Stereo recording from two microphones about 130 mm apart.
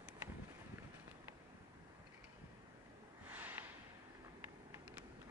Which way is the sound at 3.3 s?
15° right (ahead or behind).